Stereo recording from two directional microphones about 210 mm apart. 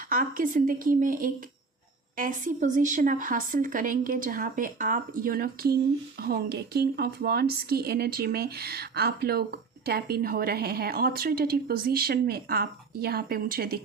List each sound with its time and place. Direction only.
0.1 s a woman's voice: 40° right (ahead or behind)